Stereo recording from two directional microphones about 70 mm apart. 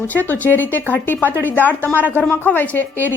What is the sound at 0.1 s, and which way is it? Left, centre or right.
Speech, left.